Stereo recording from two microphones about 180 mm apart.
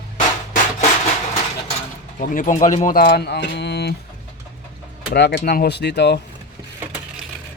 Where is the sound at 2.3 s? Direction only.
45° left (ahead or behind); by 3.9 s 70° left (ahead or behind).